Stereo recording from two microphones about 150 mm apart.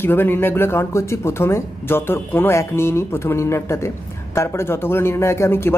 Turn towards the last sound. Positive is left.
turn(degrees=15)  # may be behind; listen again after turning